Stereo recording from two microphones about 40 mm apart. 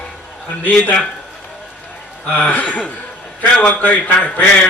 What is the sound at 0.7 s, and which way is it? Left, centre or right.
Speech, left.